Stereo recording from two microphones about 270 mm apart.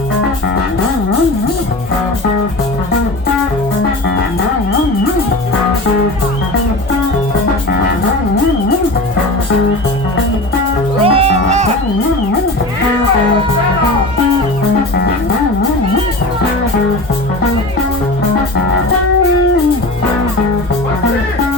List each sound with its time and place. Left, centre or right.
11.0 s music: right